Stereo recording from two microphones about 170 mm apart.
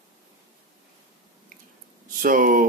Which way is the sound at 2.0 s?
50° right (ahead or behind).